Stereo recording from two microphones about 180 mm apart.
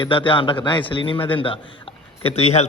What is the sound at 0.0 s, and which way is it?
A man's voice, 30° left (ahead or behind).